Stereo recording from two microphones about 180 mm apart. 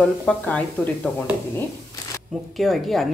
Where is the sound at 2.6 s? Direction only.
Centre (ahead or behind).